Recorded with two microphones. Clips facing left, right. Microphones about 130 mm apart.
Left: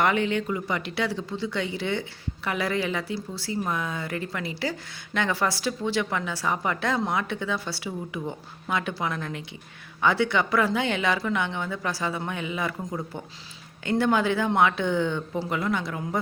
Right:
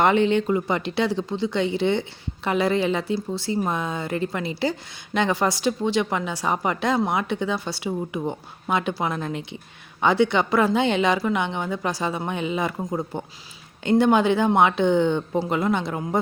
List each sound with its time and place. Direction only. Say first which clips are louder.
0.0 s speech: right 5 dB; 25° right (ahead or behind)
14.0 s speech: right 4 dB; 20° right (ahead or behind)